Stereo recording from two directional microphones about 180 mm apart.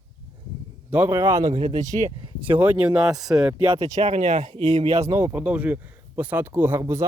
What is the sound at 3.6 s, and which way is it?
Speech, 20° right (ahead or behind).